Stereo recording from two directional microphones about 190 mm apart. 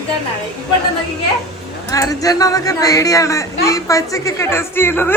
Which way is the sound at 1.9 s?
20° left (ahead or behind).